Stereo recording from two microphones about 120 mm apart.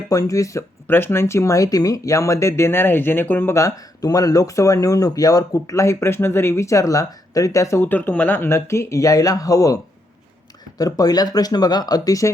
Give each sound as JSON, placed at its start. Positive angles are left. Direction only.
{"t": 0.1, "sound": "speech", "side_deg": 30}